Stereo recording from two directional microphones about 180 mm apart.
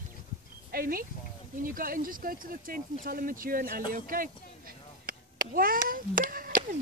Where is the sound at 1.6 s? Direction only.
50° right (ahead or behind).